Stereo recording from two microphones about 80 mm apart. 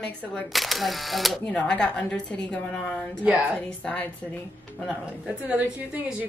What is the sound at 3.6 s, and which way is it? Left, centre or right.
Speech, centre.